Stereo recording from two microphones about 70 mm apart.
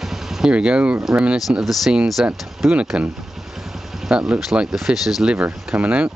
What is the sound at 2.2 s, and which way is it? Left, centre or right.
Speech, centre.